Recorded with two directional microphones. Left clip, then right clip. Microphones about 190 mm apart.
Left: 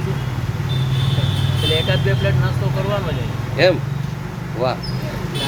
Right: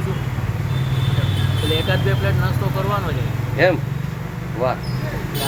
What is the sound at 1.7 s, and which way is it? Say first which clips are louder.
Speech: left 1 dB; centre (ahead or behind).